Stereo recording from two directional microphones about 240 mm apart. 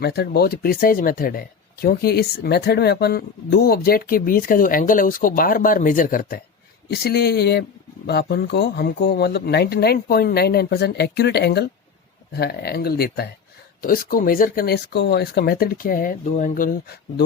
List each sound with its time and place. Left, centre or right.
0.0 s speech: left